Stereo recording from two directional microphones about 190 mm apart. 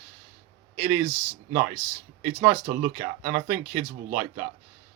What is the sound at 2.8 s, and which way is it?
Speech, 15° right (ahead or behind).